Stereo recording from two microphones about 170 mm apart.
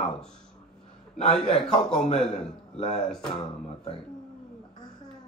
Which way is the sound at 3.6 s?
35° left (ahead or behind).